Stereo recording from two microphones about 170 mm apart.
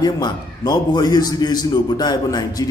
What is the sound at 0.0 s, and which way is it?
A man's voice, 25° left (ahead or behind).